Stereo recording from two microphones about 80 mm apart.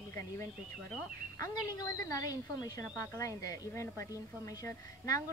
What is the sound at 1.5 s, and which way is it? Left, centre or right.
A woman's voice, left.